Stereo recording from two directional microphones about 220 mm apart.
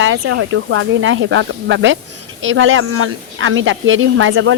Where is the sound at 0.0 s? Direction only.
65° right (ahead or behind).